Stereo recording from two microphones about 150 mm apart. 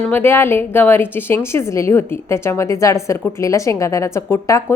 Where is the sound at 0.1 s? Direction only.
15° left (ahead or behind).